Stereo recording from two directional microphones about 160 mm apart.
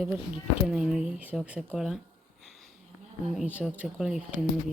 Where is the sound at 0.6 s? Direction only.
5° right (ahead or behind).